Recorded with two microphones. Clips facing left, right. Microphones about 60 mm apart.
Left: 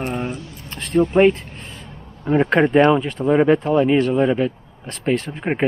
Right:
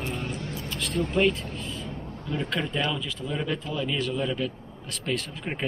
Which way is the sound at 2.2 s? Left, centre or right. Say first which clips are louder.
Left 14 dB; left.